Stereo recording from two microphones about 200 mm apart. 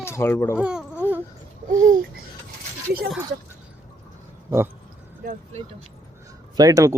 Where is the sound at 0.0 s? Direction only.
10° left (ahead or behind).